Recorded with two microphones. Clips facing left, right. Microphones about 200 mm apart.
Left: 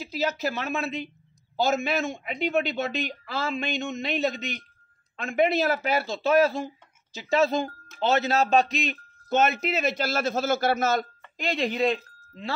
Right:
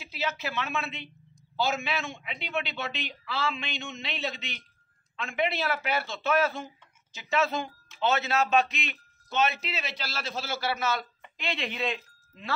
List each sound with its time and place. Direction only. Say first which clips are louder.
0.0 s a man's voice: left 6 dB; 40° left (ahead or behind)